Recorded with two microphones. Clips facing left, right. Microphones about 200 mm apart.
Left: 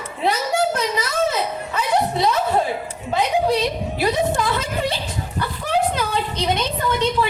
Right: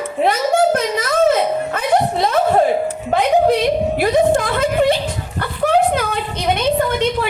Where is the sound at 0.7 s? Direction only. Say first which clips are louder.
Right 5 dB; 55° right (ahead or behind).